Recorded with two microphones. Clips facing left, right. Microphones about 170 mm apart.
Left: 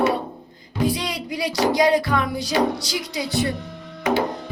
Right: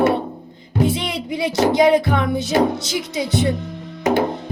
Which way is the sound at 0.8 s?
25° right (ahead or behind).